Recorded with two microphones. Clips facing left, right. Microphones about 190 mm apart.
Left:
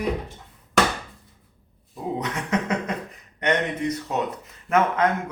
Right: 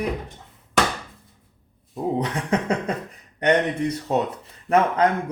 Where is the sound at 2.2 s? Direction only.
30° right (ahead or behind).